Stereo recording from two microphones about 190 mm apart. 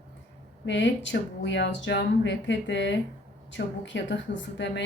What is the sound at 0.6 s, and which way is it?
A woman's voice, 70° left (ahead or behind).